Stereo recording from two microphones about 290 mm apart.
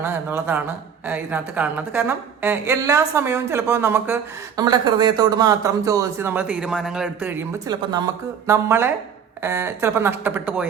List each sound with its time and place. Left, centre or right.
0.0 s a woman's voice: centre